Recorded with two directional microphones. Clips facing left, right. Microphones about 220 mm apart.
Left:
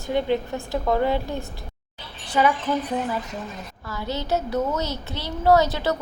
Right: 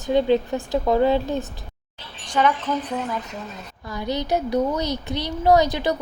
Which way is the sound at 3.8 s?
15° right (ahead or behind).